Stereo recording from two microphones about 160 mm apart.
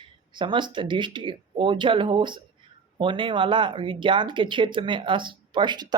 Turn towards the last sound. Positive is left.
turn(degrees=-25)  # may be behind; listen again after turning